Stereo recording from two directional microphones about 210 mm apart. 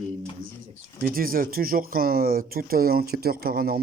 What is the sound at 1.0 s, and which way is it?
Speech, 45° right (ahead or behind).